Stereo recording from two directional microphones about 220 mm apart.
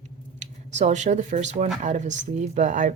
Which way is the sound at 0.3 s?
30° right (ahead or behind).